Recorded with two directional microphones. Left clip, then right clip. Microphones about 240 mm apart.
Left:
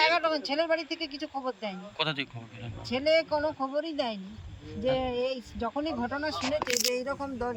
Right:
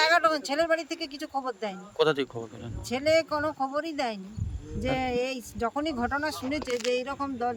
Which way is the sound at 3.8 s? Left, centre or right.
Right.